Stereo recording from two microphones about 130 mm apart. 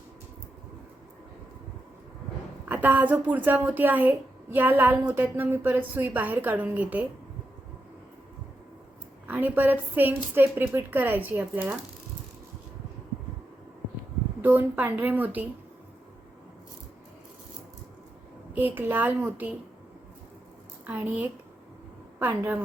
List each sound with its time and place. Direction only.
2.6 s a woman's voice: 15° right (ahead or behind)
9.2 s a woman's voice: 15° right (ahead or behind)
14.4 s a woman's voice: 15° right (ahead or behind)
18.5 s a woman's voice: 15° right (ahead or behind)
20.8 s a woman's voice: 15° right (ahead or behind)